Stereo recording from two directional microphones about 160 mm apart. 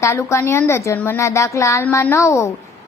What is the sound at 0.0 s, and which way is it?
A woman's voice, 15° left (ahead or behind).